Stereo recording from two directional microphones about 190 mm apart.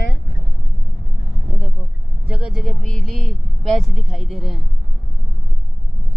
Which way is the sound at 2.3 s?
5° right (ahead or behind).